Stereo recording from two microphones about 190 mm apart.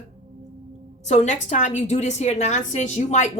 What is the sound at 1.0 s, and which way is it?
A woman's voice, 35° left (ahead or behind).